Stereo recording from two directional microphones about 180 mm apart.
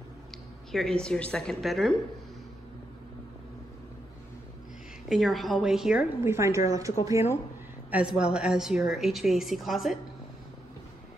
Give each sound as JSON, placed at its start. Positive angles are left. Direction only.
{"t": 0.7, "sound": "a woman's voice", "side_deg": 0}
{"t": 5.1, "sound": "a woman's voice", "side_deg": 0}
{"t": 7.9, "sound": "a woman's voice", "side_deg": -5}